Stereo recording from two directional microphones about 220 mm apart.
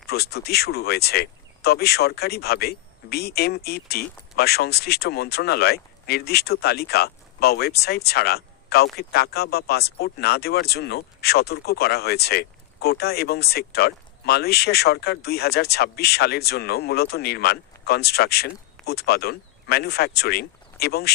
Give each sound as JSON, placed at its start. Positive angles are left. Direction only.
{"t": 0.1, "sound": "speech", "side_deg": 45}